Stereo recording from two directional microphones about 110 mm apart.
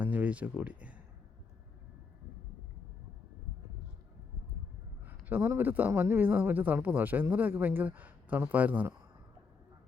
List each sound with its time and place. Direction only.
0.0 s speech: 15° right (ahead or behind)
5.0 s speech: 20° right (ahead or behind)